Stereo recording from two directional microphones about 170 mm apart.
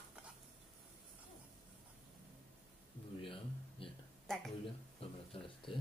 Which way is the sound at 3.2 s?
30° left (ahead or behind).